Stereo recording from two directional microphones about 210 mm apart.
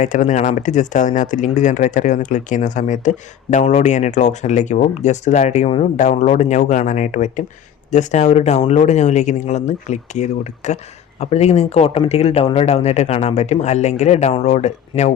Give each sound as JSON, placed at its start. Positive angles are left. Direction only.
{"t": 0.0, "sound": "speech", "side_deg": 35}